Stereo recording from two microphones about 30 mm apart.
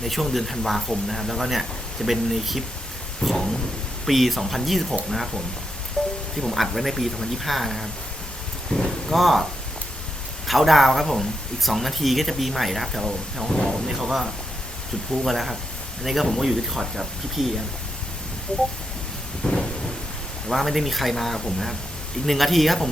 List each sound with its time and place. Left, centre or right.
0.0 s speech: centre
3.2 s a sound: centre
4.0 s speech: centre
6.0 s music: left
6.3 s speech: centre
8.7 s speech: left
9.0 s speech: centre
18.5 s speech: left
19.4 s thunder: left
20.5 s speech: centre